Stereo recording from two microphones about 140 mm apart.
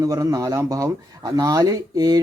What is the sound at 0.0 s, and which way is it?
Speech, 25° right (ahead or behind).